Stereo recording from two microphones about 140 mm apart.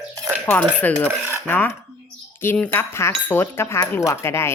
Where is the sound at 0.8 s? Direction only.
15° left (ahead or behind).